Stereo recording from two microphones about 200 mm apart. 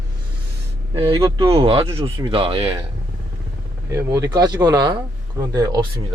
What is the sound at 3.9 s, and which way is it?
Speech, 15° right (ahead or behind).